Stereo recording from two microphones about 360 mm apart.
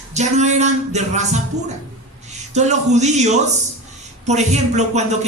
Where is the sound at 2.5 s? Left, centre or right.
Centre.